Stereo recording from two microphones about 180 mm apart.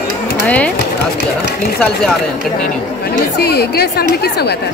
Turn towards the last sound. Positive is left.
turn(degrees=60)  # may be behind; listen again after turning